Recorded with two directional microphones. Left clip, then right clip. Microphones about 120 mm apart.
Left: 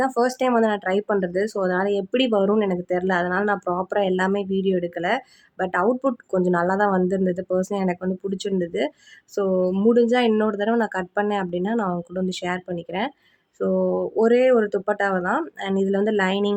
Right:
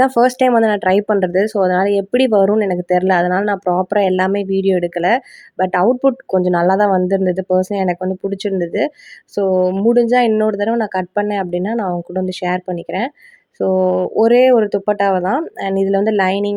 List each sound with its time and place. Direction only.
0.0 s speech: 60° right (ahead or behind); by 16.6 s 45° right (ahead or behind)